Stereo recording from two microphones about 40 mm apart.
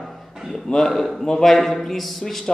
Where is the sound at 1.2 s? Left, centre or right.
Centre.